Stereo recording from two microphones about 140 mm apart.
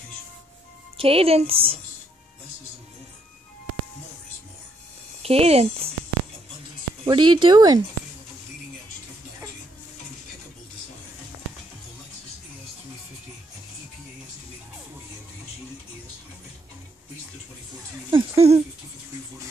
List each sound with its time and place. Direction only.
0.9 s a woman's voice: 40° right (ahead or behind)
5.2 s a woman's voice: 45° right (ahead or behind)
7.1 s speech: 35° right (ahead or behind)
18.1 s a sound: 45° right (ahead or behind)